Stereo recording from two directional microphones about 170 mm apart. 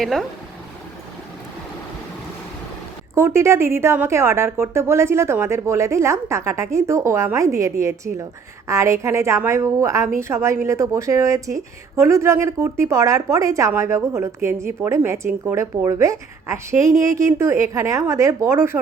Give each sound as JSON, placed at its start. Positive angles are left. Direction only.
{"t": 0.0, "sound": "speech", "side_deg": 0}
{"t": 3.2, "sound": "a woman's voice", "side_deg": -15}